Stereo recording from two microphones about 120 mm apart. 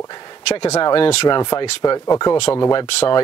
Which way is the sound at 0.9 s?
45° left (ahead or behind).